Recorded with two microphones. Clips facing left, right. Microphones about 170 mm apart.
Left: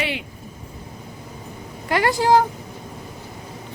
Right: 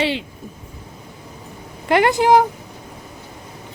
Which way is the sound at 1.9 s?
20° right (ahead or behind).